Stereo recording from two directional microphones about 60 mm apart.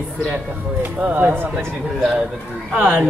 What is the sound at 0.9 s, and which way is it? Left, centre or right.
Speech, right.